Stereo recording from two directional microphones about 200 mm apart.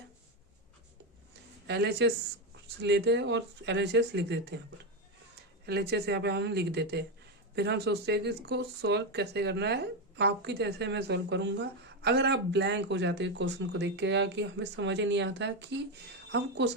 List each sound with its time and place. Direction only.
1.6 s speech: 55° right (ahead or behind)
5.6 s speech: 55° right (ahead or behind)